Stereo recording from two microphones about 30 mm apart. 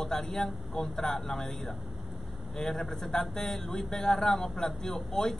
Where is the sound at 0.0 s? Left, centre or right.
Centre.